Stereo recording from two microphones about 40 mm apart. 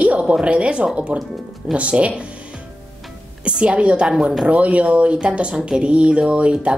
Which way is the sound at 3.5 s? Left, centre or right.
Right.